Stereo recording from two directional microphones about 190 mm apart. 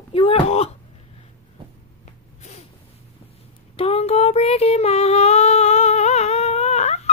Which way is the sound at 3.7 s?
30° left (ahead or behind).